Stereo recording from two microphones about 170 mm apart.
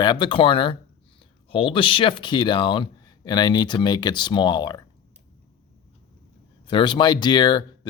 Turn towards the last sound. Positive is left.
turn(degrees=25)  # may be behind; listen again after turning